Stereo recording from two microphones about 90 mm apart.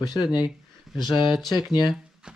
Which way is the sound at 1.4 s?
50° left (ahead or behind).